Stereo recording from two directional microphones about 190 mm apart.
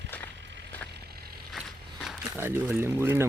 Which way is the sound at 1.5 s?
Centre (ahead or behind).